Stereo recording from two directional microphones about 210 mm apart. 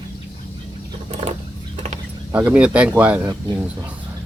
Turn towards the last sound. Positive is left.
turn(degrees=-5)  # may be behind; listen again after turning